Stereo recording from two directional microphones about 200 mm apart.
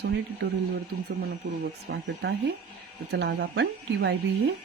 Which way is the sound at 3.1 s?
55° right (ahead or behind).